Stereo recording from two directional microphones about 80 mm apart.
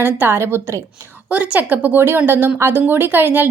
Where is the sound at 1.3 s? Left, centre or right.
Centre.